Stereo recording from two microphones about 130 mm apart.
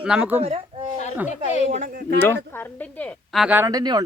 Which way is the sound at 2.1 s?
15° left (ahead or behind).